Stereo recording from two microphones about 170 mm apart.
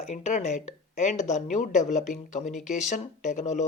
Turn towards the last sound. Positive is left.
turn(degrees=45)  # may be behind; listen again after turning